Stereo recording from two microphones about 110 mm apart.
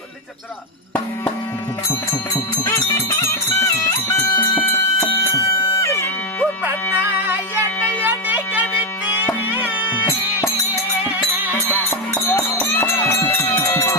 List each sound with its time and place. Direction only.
1.9 s music: 20° left (ahead or behind)
4.9 s bagpipes: 30° left (ahead or behind)
6.7 s music: 15° right (ahead or behind)
11.7 s music: 20° left (ahead or behind)